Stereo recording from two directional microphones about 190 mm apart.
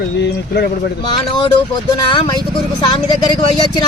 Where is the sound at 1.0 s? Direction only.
25° left (ahead or behind).